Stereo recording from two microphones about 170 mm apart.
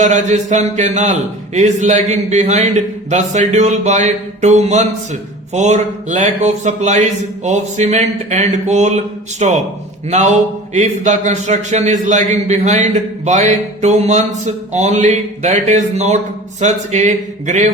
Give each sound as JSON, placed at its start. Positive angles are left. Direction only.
{"t": 0.0, "sound": "speech", "side_deg": -45}